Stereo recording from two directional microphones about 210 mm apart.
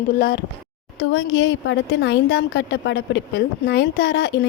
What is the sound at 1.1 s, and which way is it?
A woman's voice, 65° left (ahead or behind).